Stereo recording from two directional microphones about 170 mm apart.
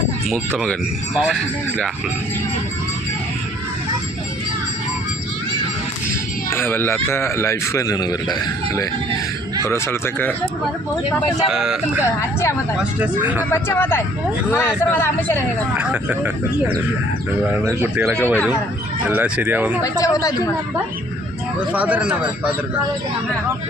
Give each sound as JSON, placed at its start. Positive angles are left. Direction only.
{"t": 0.6, "sound": "a man's voice", "side_deg": 0}
{"t": 6.5, "sound": "speech", "side_deg": 15}
{"t": 11.4, "sound": "a man's voice", "side_deg": -5}
{"t": 13.5, "sound": "speech", "side_deg": 15}
{"t": 15.8, "sound": "speech", "side_deg": -10}
{"t": 19.8, "sound": "speech", "side_deg": 20}
{"t": 21.7, "sound": "speech", "side_deg": -10}